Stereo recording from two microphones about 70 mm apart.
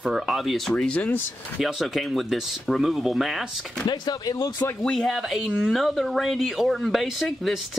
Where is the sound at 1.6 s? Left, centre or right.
Centre.